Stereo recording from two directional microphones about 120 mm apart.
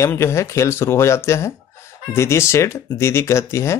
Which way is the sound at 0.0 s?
20° left (ahead or behind).